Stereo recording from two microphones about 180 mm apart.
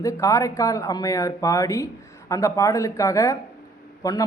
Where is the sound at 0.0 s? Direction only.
20° left (ahead or behind).